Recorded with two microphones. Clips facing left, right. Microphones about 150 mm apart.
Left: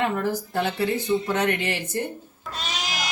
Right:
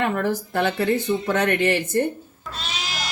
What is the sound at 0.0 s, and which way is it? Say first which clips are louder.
Speech: right 2 dB; 60° right (ahead or behind).